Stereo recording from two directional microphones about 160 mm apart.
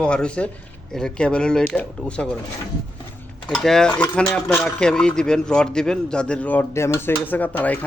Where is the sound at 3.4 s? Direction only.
Centre (ahead or behind).